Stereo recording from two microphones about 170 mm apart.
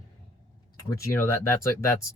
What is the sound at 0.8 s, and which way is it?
Speech, 20° left (ahead or behind).